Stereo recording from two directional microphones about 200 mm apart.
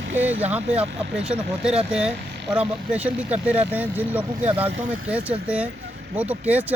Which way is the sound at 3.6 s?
10° right (ahead or behind).